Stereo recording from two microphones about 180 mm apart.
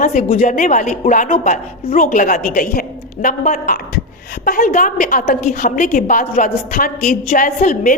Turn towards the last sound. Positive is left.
turn(degrees=45)  # may be behind; listen again after turning